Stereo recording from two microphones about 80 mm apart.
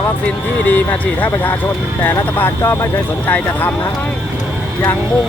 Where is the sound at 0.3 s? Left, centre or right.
Centre.